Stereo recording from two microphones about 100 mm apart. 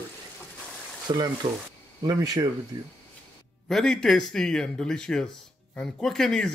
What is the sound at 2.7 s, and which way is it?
Speech, 50° right (ahead or behind).